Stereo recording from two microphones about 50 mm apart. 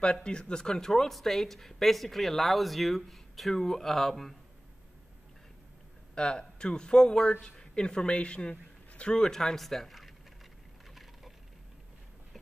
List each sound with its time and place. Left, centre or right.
0.0 s speech: centre
6.1 s speech: centre
9.3 s speech: centre